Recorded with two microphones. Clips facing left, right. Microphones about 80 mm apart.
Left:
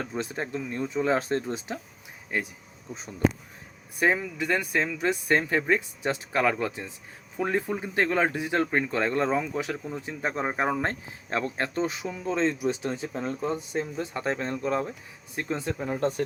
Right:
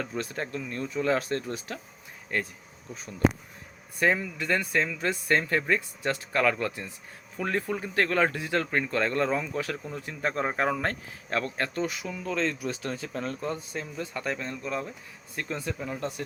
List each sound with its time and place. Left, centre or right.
0.0 s speech: left
2.9 s speech: left